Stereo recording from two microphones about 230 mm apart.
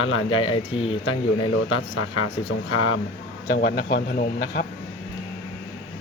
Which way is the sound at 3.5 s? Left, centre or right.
Left.